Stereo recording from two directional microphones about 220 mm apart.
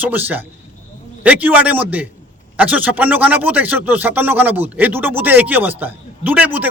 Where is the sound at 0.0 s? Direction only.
10° right (ahead or behind).